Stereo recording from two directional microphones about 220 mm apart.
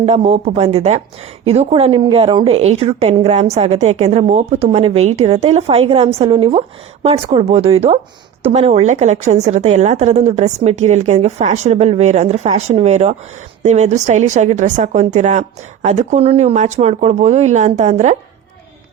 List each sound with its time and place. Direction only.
0.0 s a woman's voice: 25° right (ahead or behind)